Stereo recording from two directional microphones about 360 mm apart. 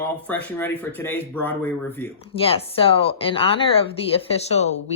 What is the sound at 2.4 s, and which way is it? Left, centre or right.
Speech, centre.